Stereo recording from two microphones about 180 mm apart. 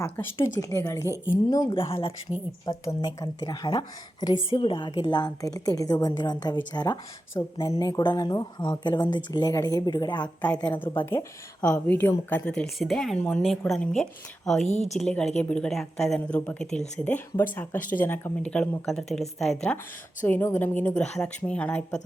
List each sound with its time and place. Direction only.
0.0 s a woman's voice: 10° left (ahead or behind)
10.2 s a woman's voice: 5° left (ahead or behind)
14.7 s speech: 40° left (ahead or behind)
14.9 s a woman's voice: 5° left (ahead or behind)